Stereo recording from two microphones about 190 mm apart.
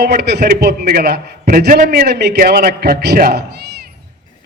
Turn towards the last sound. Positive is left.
turn(degrees=-55)  # may be behind; listen again after turning